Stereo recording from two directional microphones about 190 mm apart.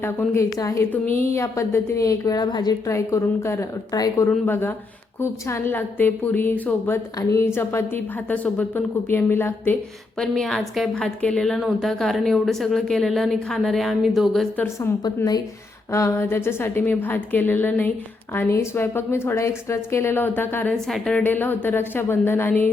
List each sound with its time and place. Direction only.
0.0 s a woman's voice: 15° left (ahead or behind)